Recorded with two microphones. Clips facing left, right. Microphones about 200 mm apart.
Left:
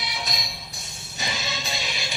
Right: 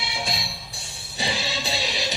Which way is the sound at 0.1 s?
30° right (ahead or behind).